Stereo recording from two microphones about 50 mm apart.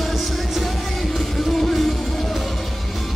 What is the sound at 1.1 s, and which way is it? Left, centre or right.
Music, centre.